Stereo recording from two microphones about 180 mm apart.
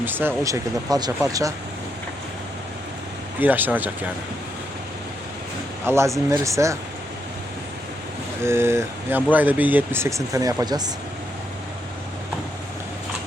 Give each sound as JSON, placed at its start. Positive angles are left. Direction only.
{"t": 0.0, "sound": "speech", "side_deg": -10}
{"t": 3.4, "sound": "speech", "side_deg": -10}
{"t": 5.8, "sound": "speech", "side_deg": -15}
{"t": 8.4, "sound": "speech", "side_deg": -15}